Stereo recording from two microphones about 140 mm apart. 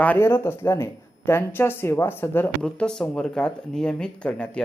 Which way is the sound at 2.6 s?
5° left (ahead or behind).